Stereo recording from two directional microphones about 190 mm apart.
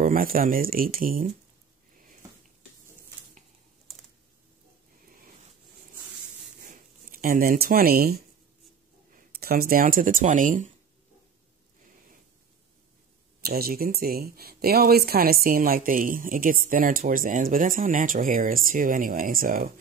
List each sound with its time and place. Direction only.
0.0 s speech: 45° right (ahead or behind)
3.9 s typing: centre (ahead or behind)
6.7 s speech: 50° right (ahead or behind)
13.4 s speech: 50° right (ahead or behind)